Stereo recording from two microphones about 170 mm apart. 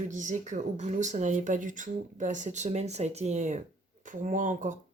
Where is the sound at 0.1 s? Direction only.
45° right (ahead or behind).